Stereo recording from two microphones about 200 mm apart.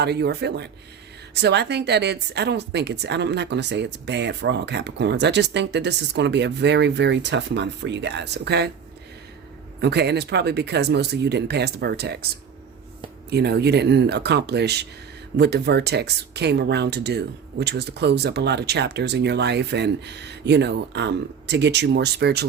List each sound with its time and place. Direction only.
0.0 s speech: 55° right (ahead or behind)
9.8 s speech: 55° right (ahead or behind)
13.3 s speech: 55° right (ahead or behind)